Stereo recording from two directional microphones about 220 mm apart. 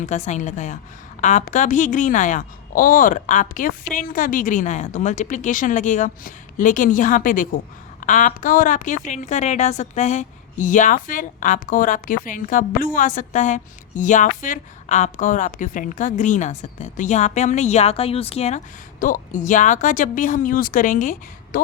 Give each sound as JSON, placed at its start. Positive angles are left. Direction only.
{"t": 0.0, "sound": "a woman's voice", "side_deg": 35}